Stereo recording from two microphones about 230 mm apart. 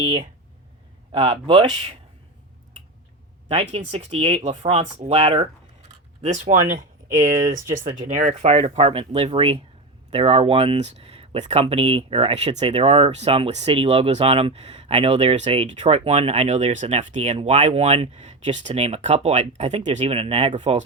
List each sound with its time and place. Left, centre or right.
0.0 s speech: right
3.5 s speech: right